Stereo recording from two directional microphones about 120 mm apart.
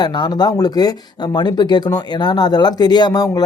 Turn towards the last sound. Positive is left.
turn(degrees=35)  # may be behind; listen again after turning